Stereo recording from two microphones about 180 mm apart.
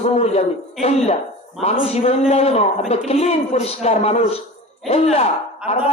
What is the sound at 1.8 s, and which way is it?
A man's voice, 35° left (ahead or behind).